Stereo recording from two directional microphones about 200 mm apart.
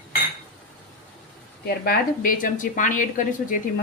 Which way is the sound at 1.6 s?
50° left (ahead or behind).